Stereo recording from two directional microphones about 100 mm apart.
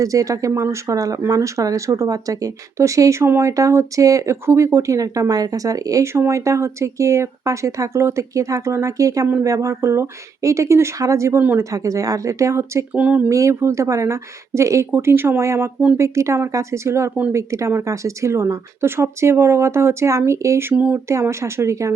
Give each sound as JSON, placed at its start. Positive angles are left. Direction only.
{"t": 0.0, "sound": "speech", "side_deg": -35}
{"t": 12.9, "sound": "speech", "side_deg": -15}
{"t": 13.3, "sound": "speech", "side_deg": -30}
{"t": 20.7, "sound": "speech", "side_deg": -15}
{"t": 21.1, "sound": "speech", "side_deg": -30}